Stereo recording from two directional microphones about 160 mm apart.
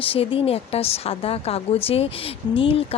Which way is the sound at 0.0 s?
35° left (ahead or behind).